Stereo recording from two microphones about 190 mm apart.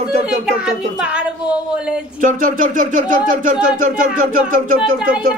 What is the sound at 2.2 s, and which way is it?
Speech, 45° right (ahead or behind).